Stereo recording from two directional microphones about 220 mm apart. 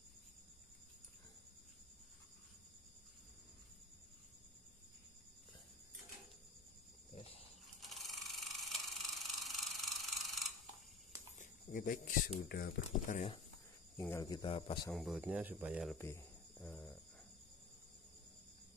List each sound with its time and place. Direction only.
7.2 s a sound: 25° left (ahead or behind)
7.6 s a sound: centre (ahead or behind)
11.3 s speech: 40° left (ahead or behind)
13.9 s speech: 15° left (ahead or behind)
14.9 s speech: centre (ahead or behind)
16.0 s cricket: 10° left (ahead or behind)